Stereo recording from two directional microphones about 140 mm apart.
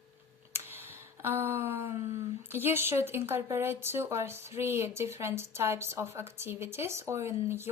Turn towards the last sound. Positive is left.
turn(degrees=-20)  # may be behind; listen again after turning